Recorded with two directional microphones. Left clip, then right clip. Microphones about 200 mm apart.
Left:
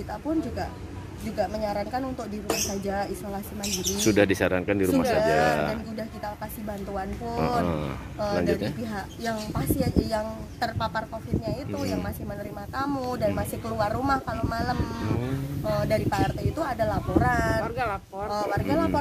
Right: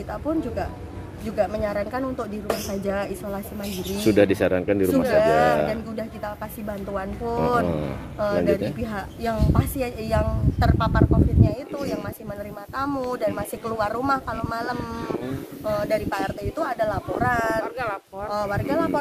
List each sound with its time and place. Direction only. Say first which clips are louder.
1.3 s speech: right 4 dB; 5° right (ahead or behind)
17.6 s speech: right 1 dB; 40° left (ahead or behind)
18.3 s speech: right 2 dB; 5° right (ahead or behind)